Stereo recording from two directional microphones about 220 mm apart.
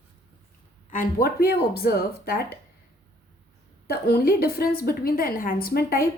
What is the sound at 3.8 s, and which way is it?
A woman's voice, 45° left (ahead or behind).